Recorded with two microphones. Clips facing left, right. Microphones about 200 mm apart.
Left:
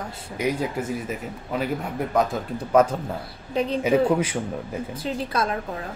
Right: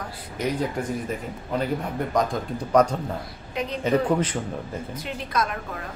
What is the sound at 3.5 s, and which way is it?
Speech, 30° left (ahead or behind).